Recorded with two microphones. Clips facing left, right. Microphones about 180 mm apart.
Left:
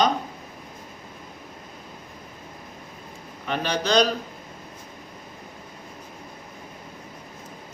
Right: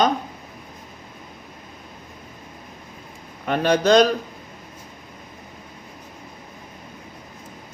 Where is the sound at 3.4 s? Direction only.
50° right (ahead or behind).